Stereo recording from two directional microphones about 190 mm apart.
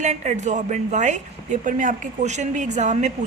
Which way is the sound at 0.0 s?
40° right (ahead or behind).